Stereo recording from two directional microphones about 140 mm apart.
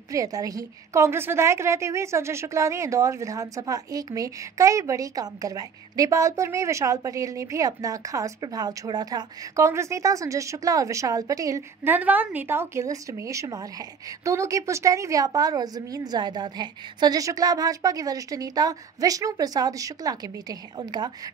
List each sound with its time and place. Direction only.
0.1 s a woman's voice: 25° right (ahead or behind)